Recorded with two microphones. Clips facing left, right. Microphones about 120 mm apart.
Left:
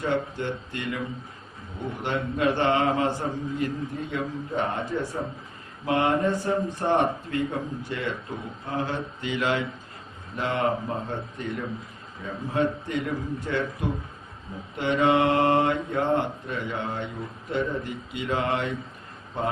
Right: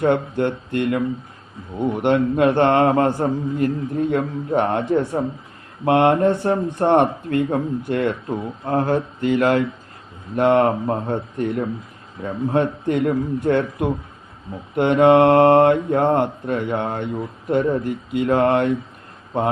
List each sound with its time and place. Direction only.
0.0 s speech: 55° right (ahead or behind)